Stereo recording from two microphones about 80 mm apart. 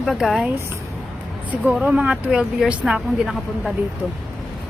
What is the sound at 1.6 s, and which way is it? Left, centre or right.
A woman's voice, centre.